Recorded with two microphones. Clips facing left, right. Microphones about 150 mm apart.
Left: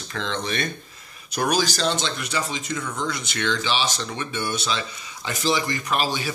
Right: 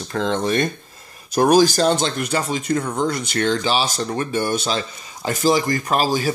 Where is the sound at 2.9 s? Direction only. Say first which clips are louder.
Right 7 dB; 45° right (ahead or behind).